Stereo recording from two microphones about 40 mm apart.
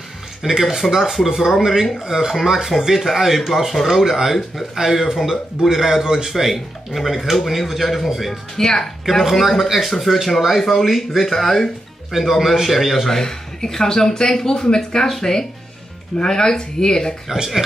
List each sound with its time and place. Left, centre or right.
0.4 s speech: centre
6.3 s speech: centre
8.3 s speech: centre
9.3 s speech: centre
11.2 s speech: centre
12.1 s speech: centre
13.1 s speech: centre